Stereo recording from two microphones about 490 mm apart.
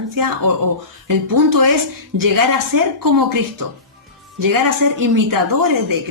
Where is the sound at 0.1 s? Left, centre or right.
Right.